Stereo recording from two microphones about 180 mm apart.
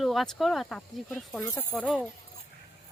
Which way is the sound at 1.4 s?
20° left (ahead or behind).